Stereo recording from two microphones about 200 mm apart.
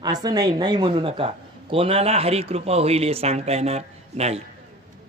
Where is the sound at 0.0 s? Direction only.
20° right (ahead or behind).